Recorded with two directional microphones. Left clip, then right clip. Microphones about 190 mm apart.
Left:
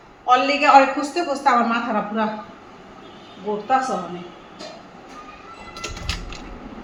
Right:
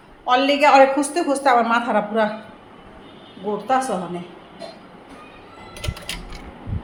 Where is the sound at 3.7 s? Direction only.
35° right (ahead or behind).